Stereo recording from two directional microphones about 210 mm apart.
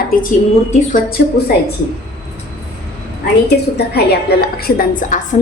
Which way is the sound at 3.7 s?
50° left (ahead or behind).